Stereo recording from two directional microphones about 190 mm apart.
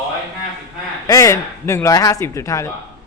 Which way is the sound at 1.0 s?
15° left (ahead or behind).